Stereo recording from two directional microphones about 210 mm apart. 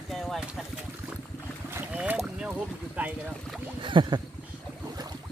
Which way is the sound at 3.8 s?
25° right (ahead or behind).